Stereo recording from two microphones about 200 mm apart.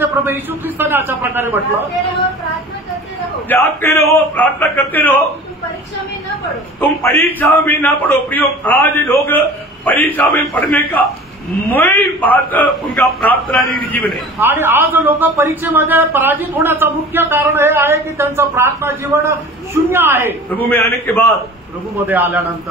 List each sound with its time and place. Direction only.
0.0 s a man's voice: 10° right (ahead or behind)
3.4 s a man's voice: 10° left (ahead or behind)
6.8 s a man's voice: 10° left (ahead or behind)
14.4 s a man's voice: 10° right (ahead or behind)
20.4 s a man's voice: 10° left (ahead or behind)
22.0 s a man's voice: 10° right (ahead or behind)